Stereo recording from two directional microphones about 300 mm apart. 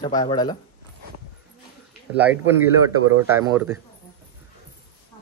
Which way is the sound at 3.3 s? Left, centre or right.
Centre.